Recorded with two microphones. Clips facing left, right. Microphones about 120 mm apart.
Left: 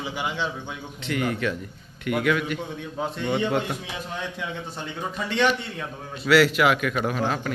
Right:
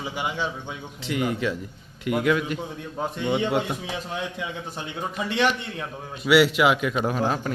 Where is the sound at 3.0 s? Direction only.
15° right (ahead or behind).